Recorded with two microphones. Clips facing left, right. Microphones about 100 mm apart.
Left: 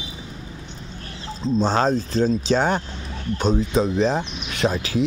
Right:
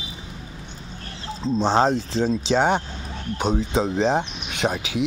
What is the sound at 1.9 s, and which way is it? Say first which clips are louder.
Speech: left 2 dB; 80° right.